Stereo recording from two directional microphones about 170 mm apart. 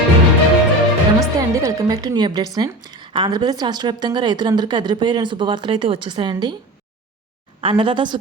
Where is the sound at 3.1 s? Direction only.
25° right (ahead or behind).